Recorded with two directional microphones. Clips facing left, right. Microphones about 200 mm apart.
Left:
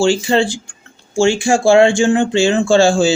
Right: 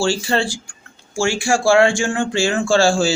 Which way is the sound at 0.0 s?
20° left (ahead or behind).